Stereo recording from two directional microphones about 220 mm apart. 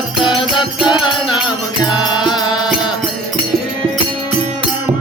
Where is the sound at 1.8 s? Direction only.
20° left (ahead or behind).